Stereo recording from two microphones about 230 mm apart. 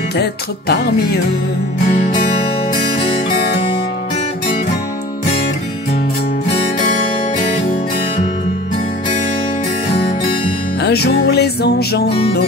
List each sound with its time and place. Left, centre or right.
0.2 s music: left
3.0 s music: left
10.8 s music: left